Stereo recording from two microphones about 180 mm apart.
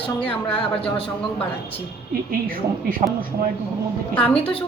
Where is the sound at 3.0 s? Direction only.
40° right (ahead or behind).